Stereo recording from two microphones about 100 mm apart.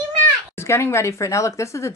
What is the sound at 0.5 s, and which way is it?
A woman's voice, 25° left (ahead or behind).